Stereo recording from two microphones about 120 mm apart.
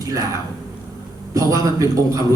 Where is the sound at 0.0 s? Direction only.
30° right (ahead or behind).